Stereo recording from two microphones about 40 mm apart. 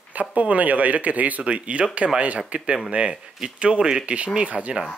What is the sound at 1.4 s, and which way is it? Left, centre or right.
Speech, right.